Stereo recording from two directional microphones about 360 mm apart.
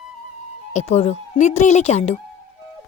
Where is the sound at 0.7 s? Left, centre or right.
Centre.